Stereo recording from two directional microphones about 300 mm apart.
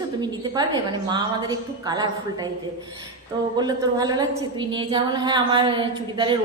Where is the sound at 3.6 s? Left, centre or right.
Centre.